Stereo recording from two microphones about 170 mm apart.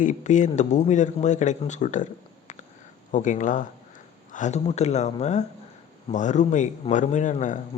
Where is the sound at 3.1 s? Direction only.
45° left (ahead or behind).